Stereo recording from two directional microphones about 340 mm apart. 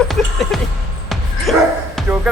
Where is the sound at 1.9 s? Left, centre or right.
Centre.